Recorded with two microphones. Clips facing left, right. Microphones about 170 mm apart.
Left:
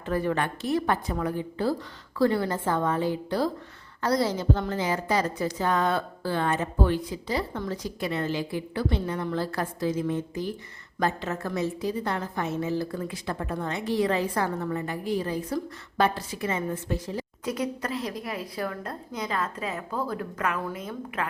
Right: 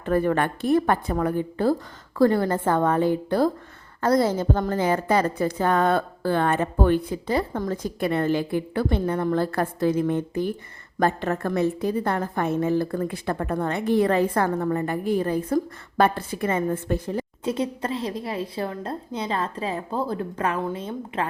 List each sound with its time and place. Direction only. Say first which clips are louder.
0.0 s a woman's voice: right 5 dB; 50° right (ahead or behind)
17.4 s a woman's voice: right 3 dB; 25° right (ahead or behind)